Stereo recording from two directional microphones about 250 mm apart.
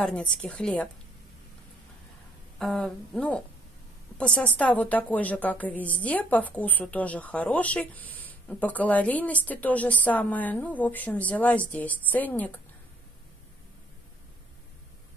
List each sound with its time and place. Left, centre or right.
0.0 s speech: centre
2.6 s a woman's voice: centre